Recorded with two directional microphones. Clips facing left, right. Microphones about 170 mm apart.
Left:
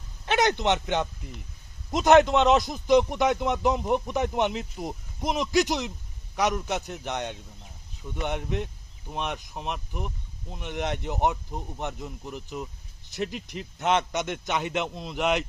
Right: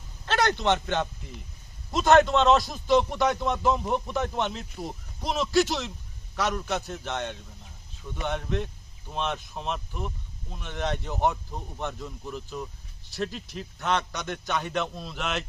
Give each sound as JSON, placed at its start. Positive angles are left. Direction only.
{"t": 0.3, "sound": "a man's voice", "side_deg": 20}